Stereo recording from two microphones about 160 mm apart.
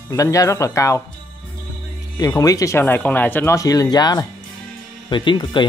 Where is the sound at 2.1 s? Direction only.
25° left (ahead or behind).